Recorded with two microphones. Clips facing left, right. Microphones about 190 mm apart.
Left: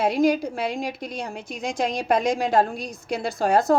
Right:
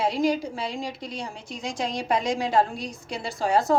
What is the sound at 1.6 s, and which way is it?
A woman's voice, 55° left (ahead or behind).